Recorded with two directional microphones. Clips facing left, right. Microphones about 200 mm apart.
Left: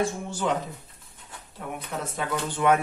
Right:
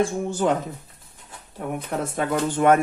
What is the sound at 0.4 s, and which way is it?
Speech, 50° right (ahead or behind).